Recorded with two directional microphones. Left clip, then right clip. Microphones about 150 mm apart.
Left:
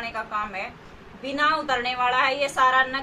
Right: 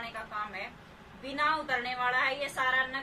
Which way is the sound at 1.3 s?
5° left (ahead or behind).